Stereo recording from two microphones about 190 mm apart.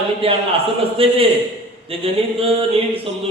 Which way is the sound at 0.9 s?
30° right (ahead or behind).